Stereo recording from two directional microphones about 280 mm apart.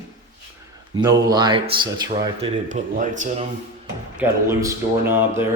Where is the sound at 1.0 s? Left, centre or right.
Centre.